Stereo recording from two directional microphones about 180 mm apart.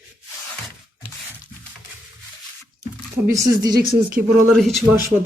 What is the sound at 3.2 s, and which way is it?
Speech, 20° right (ahead or behind).